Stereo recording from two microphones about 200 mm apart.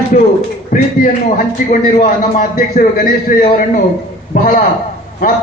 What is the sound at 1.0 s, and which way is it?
Speech, 40° left (ahead or behind).